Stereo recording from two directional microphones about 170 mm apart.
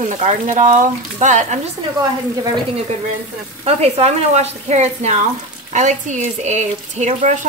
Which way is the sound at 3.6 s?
40° right (ahead or behind).